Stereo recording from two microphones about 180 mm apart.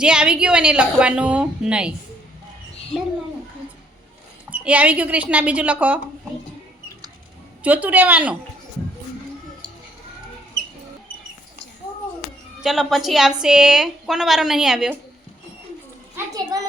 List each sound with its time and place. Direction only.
0.0 s a woman's voice: 5° right (ahead or behind)
4.4 s a woman's voice: 5° right (ahead or behind)
7.6 s a woman's voice: 10° right (ahead or behind)
12.6 s a woman's voice: centre (ahead or behind)
16.1 s a child's voice: 20° right (ahead or behind)